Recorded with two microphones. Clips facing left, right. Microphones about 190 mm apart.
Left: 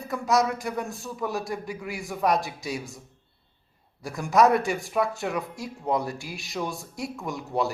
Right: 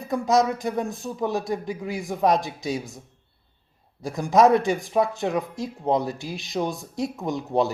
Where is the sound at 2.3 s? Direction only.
Centre (ahead or behind).